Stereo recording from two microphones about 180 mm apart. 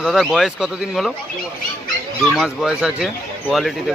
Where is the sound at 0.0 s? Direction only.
Centre (ahead or behind).